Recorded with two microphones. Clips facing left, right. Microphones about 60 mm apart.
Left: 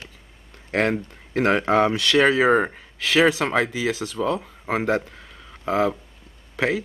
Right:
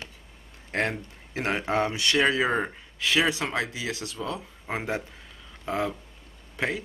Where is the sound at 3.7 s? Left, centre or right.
Left.